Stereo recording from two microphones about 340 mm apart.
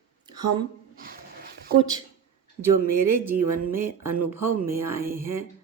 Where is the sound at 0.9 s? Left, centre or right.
Right.